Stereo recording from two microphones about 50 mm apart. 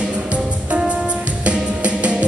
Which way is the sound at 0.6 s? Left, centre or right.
Right.